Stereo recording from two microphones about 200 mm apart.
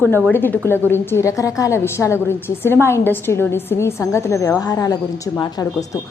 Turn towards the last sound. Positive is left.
turn(degrees=15)  # may be behind; listen again after turning